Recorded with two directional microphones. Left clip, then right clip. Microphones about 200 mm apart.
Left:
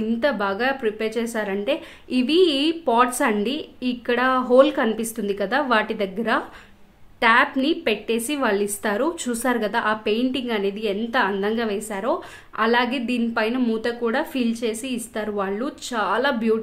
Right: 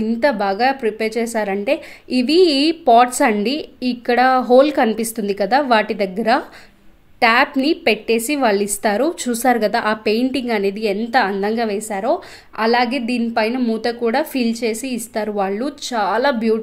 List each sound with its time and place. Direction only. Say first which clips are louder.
0.2 s a woman's voice: right 6 dB; 20° right (ahead or behind)